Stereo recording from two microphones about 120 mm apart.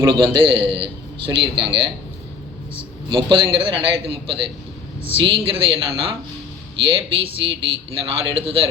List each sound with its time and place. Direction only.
0.1 s a man's voice: 45° right (ahead or behind)
3.1 s a man's voice: 45° right (ahead or behind)